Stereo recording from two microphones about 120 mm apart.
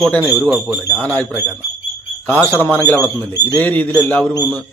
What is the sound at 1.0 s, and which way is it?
Speech, 15° left (ahead or behind).